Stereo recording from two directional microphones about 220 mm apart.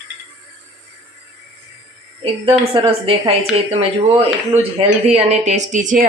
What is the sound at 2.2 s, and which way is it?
A woman's voice, 25° right (ahead or behind).